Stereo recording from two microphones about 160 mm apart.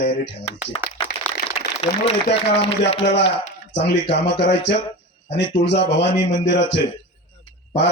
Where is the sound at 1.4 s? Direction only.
50° right (ahead or behind).